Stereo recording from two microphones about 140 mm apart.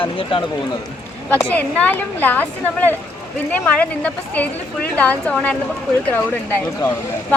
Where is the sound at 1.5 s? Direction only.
10° left (ahead or behind).